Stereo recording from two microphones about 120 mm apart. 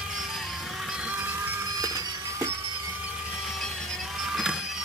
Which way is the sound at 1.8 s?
30° right (ahead or behind).